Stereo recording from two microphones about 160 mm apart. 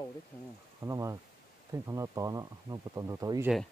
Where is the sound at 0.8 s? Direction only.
20° right (ahead or behind).